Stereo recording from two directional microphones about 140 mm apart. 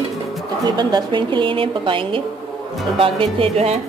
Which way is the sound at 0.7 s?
30° right (ahead or behind).